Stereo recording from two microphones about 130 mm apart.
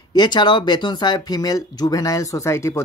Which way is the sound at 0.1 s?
35° left (ahead or behind).